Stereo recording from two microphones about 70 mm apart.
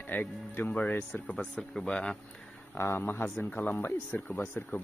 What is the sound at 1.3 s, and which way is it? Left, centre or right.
Speech, centre.